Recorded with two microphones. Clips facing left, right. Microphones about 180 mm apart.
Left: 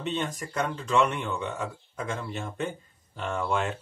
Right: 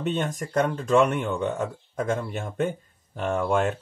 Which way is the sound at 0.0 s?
45° right (ahead or behind).